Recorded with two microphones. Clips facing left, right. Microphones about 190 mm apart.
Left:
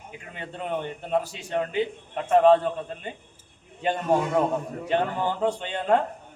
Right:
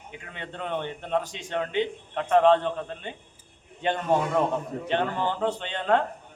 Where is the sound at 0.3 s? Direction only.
10° left (ahead or behind).